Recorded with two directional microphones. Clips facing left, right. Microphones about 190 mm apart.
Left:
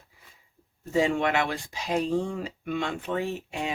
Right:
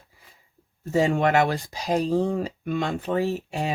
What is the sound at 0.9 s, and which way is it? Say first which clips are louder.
Speech: right 4 dB; 40° right (ahead or behind).